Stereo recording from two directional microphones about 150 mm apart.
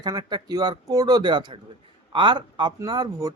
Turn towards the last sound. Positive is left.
turn(degrees=-25)  # may be behind; listen again after turning